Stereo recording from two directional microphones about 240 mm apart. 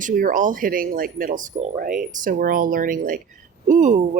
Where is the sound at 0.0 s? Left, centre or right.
Right.